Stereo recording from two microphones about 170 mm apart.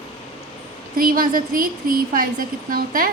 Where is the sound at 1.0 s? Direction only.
55° right (ahead or behind).